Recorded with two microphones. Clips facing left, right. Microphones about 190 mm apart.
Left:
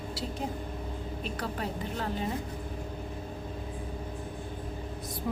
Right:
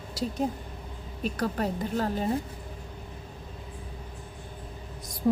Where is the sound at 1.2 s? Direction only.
45° right (ahead or behind).